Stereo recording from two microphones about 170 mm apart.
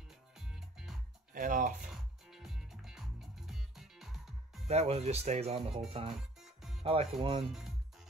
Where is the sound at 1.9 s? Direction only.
Centre (ahead or behind).